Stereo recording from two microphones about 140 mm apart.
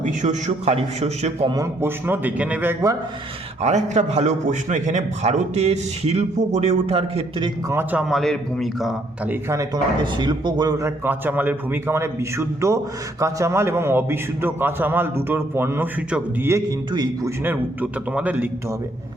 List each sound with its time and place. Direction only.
0.0 s a man's voice: 65° right (ahead or behind)
1.5 s a man's voice: 25° right (ahead or behind)
3.6 s a man's voice: 55° right (ahead or behind)
7.7 s a man's voice: 15° right (ahead or behind)
9.3 s speech: 20° right (ahead or behind)
10.0 s a man's voice: 35° right (ahead or behind)
17.4 s a man's voice: 15° right (ahead or behind)